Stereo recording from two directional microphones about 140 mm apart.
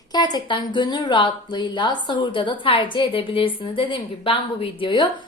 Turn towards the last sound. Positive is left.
turn(degrees=35)  # may be behind; listen again after turning